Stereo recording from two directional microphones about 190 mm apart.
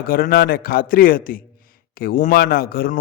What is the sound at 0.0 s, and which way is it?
A man's voice, 50° left (ahead or behind).